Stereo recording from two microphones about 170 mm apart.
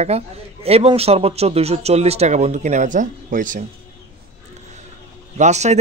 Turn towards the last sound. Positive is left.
turn(degrees=-40)  # may be behind; listen again after turning